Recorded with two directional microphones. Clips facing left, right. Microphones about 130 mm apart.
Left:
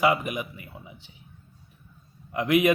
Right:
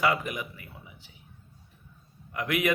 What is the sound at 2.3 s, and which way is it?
Speech, 25° left (ahead or behind).